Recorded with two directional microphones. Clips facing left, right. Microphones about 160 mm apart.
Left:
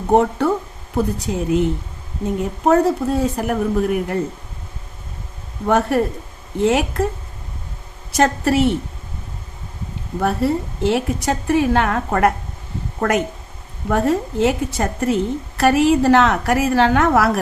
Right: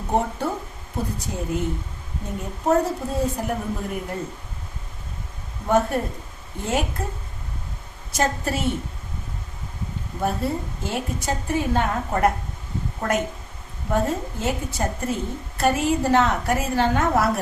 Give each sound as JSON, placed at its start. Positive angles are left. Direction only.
{"t": 0.2, "sound": "a woman's voice", "side_deg": 70}
{"t": 2.6, "sound": "a woman's voice", "side_deg": 75}
{"t": 5.6, "sound": "a woman's voice", "side_deg": 75}
{"t": 8.1, "sound": "a woman's voice", "side_deg": 75}
{"t": 10.2, "sound": "a woman's voice", "side_deg": 80}
{"t": 13.9, "sound": "a woman's voice", "side_deg": 75}